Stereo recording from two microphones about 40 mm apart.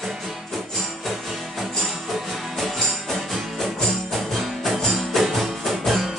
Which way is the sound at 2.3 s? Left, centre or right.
Centre.